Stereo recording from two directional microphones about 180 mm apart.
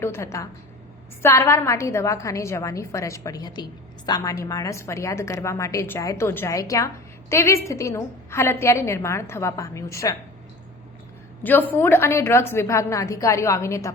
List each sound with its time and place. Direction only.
0.0 s a woman's voice: 15° left (ahead or behind)
11.4 s a woman's voice: 10° left (ahead or behind)